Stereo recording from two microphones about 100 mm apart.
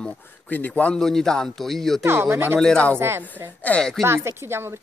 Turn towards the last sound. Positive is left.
turn(degrees=-25)  # may be behind; listen again after turning